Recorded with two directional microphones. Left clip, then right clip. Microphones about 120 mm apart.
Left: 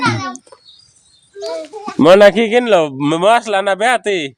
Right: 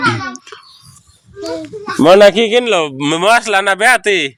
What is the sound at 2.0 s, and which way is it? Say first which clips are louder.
Speech: right 1 dB; 15° left (ahead or behind).